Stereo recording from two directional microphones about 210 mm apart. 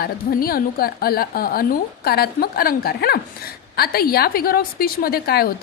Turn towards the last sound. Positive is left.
turn(degrees=45)  # may be behind; listen again after turning